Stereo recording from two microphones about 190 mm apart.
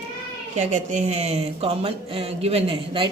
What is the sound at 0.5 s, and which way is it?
Speech, 40° right (ahead or behind).